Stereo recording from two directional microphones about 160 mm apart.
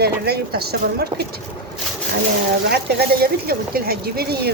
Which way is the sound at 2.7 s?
90° right.